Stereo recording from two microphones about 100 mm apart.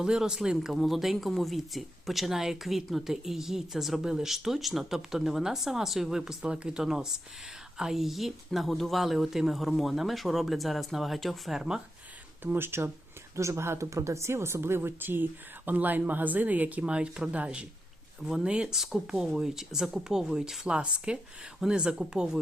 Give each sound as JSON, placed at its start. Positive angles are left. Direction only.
{"t": 0.0, "sound": "speech", "side_deg": -5}
{"t": 12.4, "sound": "speech", "side_deg": -20}